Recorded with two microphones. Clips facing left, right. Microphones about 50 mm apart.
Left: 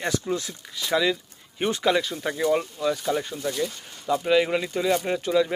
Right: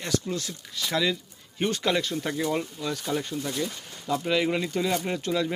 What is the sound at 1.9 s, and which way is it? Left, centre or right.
Speech, centre.